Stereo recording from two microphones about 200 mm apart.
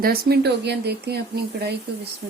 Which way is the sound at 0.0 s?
50° right (ahead or behind).